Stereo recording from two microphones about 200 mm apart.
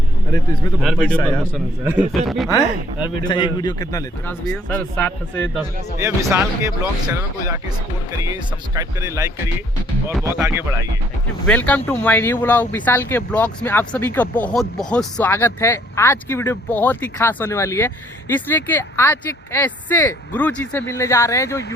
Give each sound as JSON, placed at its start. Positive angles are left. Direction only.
{"t": 0.8, "sound": "a man's voice", "side_deg": 0}
{"t": 1.8, "sound": "a man's voice", "side_deg": -10}
{"t": 3.2, "sound": "a man's voice", "side_deg": 20}
{"t": 4.7, "sound": "speech", "side_deg": 5}
{"t": 6.0, "sound": "speech", "side_deg": -15}
{"t": 10.1, "sound": "a man's voice", "side_deg": 0}
{"t": 10.4, "sound": "speech", "side_deg": -15}
{"t": 11.4, "sound": "speech", "side_deg": 5}